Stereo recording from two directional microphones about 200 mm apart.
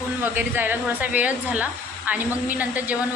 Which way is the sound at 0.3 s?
10° right (ahead or behind).